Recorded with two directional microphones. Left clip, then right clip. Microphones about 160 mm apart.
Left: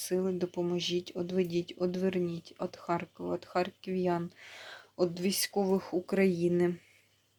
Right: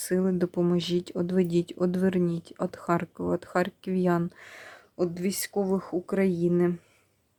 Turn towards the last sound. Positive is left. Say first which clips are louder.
# right 3 dB
turn(degrees=-25)  # may be behind; listen again after turning